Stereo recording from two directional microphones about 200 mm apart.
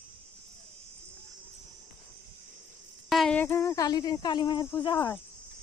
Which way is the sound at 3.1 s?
Centre (ahead or behind).